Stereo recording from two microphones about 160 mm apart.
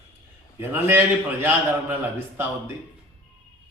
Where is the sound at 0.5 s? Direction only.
15° right (ahead or behind).